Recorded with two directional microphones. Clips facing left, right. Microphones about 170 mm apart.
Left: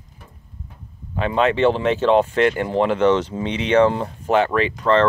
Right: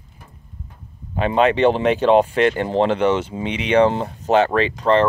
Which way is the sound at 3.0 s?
10° right (ahead or behind).